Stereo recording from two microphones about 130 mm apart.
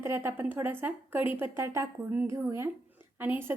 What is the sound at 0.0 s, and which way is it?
A woman's voice, 20° right (ahead or behind).